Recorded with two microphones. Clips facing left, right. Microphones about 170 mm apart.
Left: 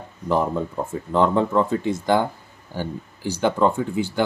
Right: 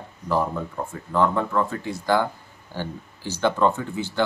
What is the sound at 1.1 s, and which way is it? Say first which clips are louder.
Speech: left 3 dB; 20° left (ahead or behind).